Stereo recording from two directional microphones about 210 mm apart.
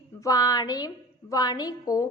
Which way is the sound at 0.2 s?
15° left (ahead or behind).